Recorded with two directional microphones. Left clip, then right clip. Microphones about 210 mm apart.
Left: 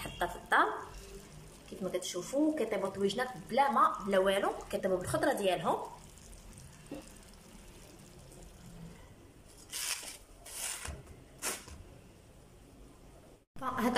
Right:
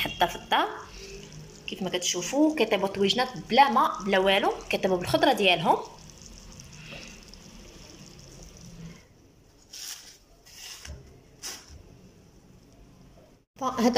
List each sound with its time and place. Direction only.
0.0 s a woman's voice: 5° right (ahead or behind)
1.9 s speech: centre (ahead or behind)
13.6 s a sound: 15° right (ahead or behind)